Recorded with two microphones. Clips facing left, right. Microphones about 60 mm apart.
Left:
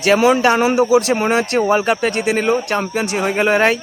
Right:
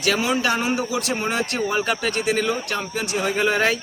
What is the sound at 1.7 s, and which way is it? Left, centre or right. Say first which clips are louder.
Speech: left 7 dB; left.